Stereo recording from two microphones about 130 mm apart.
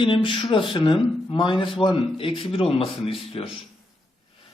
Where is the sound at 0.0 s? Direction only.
40° left (ahead or behind).